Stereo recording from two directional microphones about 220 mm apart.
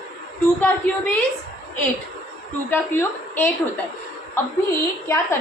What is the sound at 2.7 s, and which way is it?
A woman's voice, 10° left (ahead or behind).